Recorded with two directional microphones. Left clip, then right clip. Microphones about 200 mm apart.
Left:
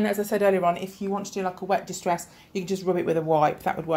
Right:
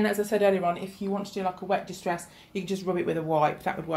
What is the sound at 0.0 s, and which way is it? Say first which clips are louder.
Speech: left 1 dB; 25° left (ahead or behind).